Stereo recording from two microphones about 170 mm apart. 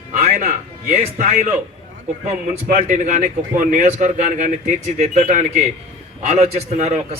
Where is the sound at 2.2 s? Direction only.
50° right (ahead or behind).